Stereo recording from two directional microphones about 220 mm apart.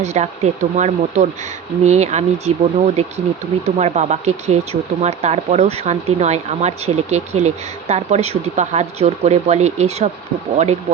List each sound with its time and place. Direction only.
0.0 s speech: 30° right (ahead or behind)